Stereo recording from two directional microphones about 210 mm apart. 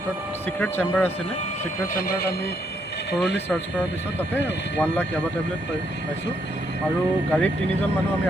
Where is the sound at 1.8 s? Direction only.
45° left (ahead or behind).